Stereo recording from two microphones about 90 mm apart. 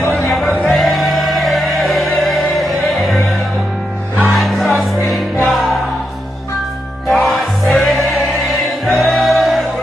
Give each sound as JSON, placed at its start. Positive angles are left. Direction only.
{"t": 0.1, "sound": "music", "side_deg": 0}
{"t": 7.1, "sound": "music", "side_deg": 0}